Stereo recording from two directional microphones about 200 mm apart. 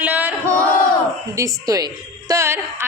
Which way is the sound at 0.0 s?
5° right (ahead or behind).